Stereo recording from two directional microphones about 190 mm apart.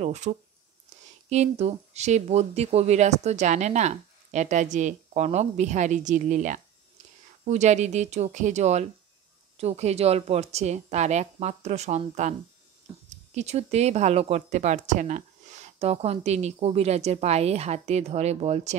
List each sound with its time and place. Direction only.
0.0 s speech: 35° right (ahead or behind)